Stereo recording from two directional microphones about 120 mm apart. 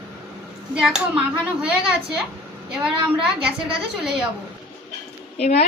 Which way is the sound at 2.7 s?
5° right (ahead or behind).